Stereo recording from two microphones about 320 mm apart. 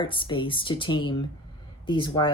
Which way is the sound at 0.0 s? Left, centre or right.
Centre.